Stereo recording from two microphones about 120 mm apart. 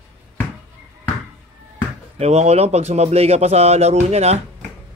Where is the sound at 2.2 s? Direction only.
60° right (ahead or behind).